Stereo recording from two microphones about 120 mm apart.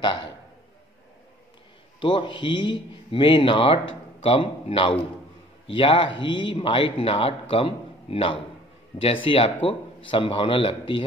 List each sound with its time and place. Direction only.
2.0 s speech: 45° left (ahead or behind)